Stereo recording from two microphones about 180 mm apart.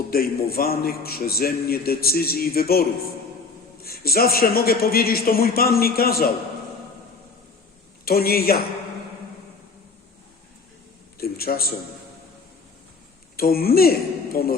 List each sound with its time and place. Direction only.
0.1 s a man's voice: 55° left (ahead or behind)
3.8 s a man's voice: 55° left (ahead or behind)
8.0 s a man's voice: 55° left (ahead or behind)
11.2 s a man's voice: 60° left (ahead or behind)
13.3 s a man's voice: 55° left (ahead or behind)